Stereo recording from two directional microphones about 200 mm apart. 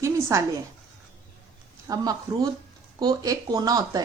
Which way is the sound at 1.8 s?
20° right (ahead or behind).